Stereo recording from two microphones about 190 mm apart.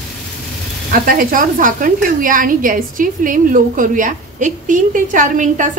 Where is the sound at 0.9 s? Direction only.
45° right (ahead or behind).